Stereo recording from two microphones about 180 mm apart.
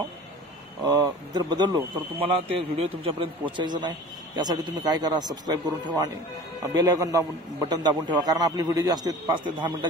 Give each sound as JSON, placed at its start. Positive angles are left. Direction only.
{"t": 0.8, "sound": "a man's voice", "side_deg": -20}